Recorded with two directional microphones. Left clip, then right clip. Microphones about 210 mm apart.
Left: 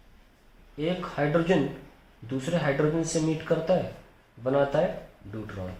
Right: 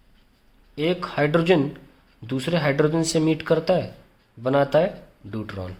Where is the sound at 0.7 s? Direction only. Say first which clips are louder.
Right 6 dB; 60° right (ahead or behind).